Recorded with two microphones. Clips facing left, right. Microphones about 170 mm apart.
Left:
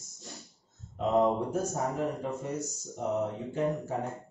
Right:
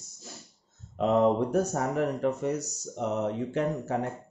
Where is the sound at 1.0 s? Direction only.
70° right (ahead or behind).